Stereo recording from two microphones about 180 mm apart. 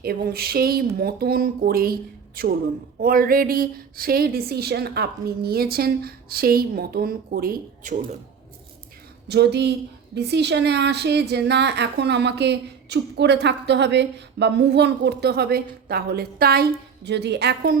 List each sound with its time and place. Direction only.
0.0 s speech: 60° right (ahead or behind)
9.3 s a woman's voice: 70° right (ahead or behind)